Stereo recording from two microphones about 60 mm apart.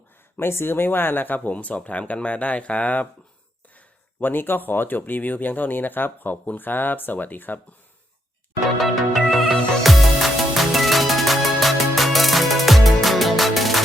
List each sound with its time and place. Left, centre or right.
0.3 s speech: left
8.8 s music: centre